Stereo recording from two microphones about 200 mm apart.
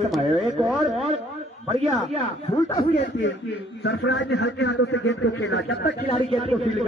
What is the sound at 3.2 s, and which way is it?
A man's voice, 65° left (ahead or behind).